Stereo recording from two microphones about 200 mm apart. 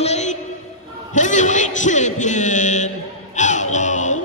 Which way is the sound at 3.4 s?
35° left (ahead or behind).